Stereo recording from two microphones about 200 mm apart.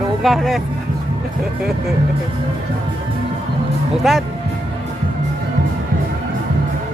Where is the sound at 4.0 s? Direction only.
Centre (ahead or behind).